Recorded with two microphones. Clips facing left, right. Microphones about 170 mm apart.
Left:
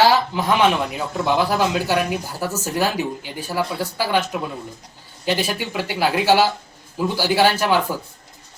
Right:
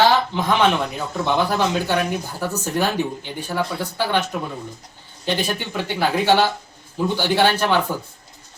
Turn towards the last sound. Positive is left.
turn(degrees=5)  # may be behind; listen again after turning